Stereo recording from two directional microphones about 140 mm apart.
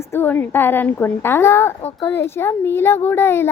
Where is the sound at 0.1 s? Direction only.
15° left (ahead or behind).